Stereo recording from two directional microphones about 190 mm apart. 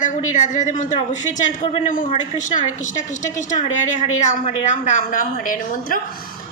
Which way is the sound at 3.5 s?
40° left (ahead or behind).